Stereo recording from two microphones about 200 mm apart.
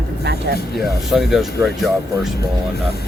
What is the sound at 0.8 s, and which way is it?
Speech, centre (ahead or behind).